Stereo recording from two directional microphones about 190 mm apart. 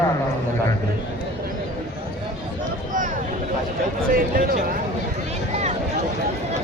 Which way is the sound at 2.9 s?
45° right (ahead or behind).